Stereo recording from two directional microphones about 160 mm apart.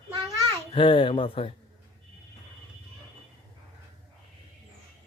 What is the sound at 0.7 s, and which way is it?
Speech, 30° left (ahead or behind).